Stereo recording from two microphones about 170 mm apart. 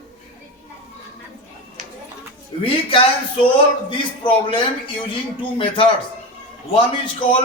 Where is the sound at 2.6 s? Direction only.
30° left (ahead or behind).